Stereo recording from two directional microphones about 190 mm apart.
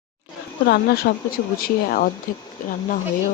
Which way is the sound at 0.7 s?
55° left (ahead or behind).